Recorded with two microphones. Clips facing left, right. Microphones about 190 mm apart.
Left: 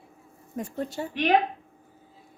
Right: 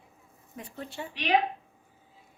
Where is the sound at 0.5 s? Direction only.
45° left (ahead or behind).